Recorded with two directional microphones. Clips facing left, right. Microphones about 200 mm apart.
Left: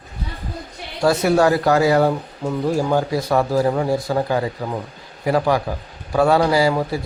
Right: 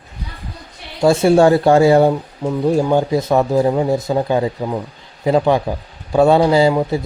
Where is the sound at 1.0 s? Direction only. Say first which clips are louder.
Right 5 dB; 25° right (ahead or behind).